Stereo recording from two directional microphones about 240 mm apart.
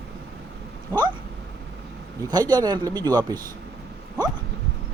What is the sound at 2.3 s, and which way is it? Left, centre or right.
Speech, centre.